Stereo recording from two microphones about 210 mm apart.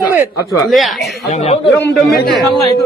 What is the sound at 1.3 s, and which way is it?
Speech, 30° left (ahead or behind).